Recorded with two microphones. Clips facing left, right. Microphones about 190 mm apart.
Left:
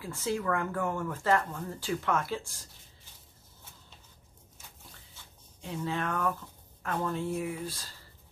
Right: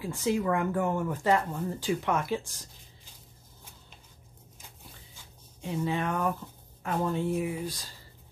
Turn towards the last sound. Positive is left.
turn(degrees=-15)  # may be behind; listen again after turning